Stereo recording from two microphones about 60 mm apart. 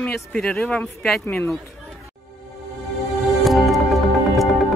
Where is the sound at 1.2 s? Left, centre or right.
Left.